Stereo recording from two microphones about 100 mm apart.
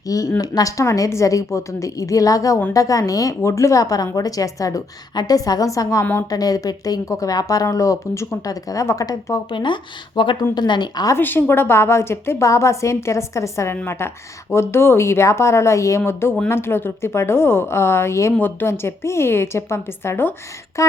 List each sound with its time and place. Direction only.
0.1 s a woman's voice: 35° left (ahead or behind)
9.5 s a woman's voice: 50° left (ahead or behind)
11.1 s a woman's voice: 20° left (ahead or behind)